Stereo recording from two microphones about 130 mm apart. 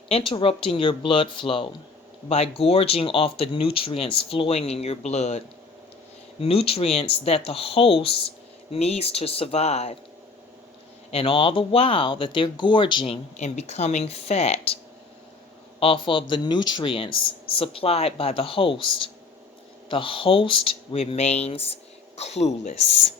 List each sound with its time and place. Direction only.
0.1 s speech: 40° left (ahead or behind)
6.4 s speech: 50° left (ahead or behind)
11.1 s speech: 45° left (ahead or behind)
13.4 s speech: 60° left (ahead or behind)
15.8 s speech: 45° left (ahead or behind); by 22.7 s 60° left (ahead or behind)